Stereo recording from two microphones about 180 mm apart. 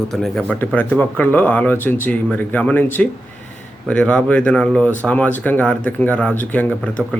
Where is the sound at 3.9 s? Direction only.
5° left (ahead or behind).